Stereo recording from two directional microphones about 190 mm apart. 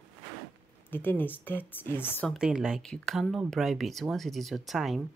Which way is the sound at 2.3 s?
5° right (ahead or behind).